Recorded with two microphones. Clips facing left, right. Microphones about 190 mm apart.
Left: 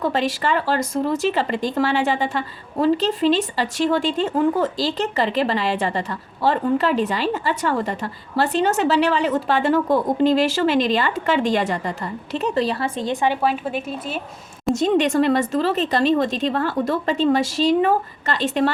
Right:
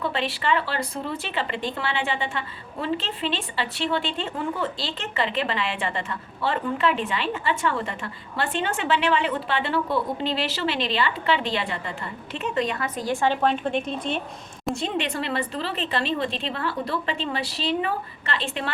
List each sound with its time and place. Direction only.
0.0 s speech: 40° left (ahead or behind)
13.2 s a woman's voice: 10° left (ahead or behind)
14.8 s a woman's voice: 40° left (ahead or behind)